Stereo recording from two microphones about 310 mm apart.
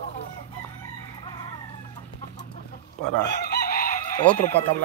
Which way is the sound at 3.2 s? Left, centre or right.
Left.